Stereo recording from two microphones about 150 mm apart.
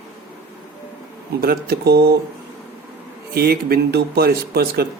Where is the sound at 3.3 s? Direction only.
90° right.